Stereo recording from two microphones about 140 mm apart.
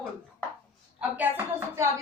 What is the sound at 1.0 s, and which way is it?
Speech, 10° right (ahead or behind).